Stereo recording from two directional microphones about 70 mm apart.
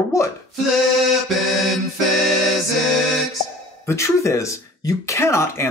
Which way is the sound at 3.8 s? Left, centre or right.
Left.